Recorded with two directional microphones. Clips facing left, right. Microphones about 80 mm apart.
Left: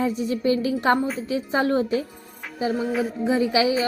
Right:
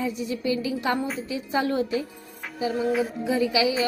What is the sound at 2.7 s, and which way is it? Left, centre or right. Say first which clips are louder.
Music: right 2 dB; centre.